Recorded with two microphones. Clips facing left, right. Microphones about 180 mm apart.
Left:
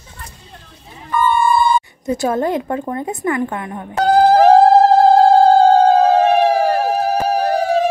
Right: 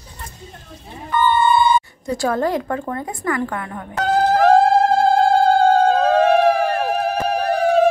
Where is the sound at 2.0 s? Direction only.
20° left (ahead or behind).